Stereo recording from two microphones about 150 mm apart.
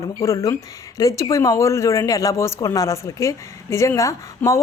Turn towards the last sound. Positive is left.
turn(degrees=20)  # may be behind; listen again after turning